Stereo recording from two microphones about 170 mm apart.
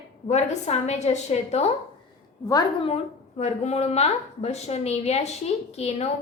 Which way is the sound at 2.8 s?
40° left (ahead or behind).